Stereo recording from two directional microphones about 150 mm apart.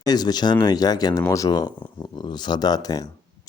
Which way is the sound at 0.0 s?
25° left (ahead or behind).